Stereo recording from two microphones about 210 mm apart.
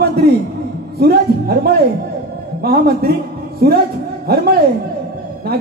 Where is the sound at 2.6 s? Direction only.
50° right (ahead or behind).